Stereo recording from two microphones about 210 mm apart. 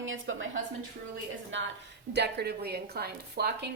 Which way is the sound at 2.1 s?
50° right (ahead or behind).